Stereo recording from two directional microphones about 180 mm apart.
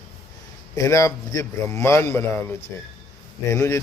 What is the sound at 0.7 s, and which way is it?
Speech, 15° left (ahead or behind).